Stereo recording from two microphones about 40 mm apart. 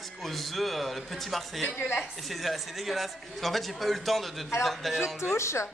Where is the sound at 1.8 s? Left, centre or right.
Left.